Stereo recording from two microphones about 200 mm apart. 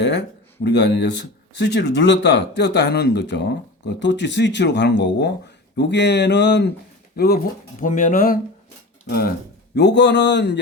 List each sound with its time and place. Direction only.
0.6 s speech: 60° left (ahead or behind)
7.8 s speech: 40° left (ahead or behind); by 10.6 s 60° left (ahead or behind)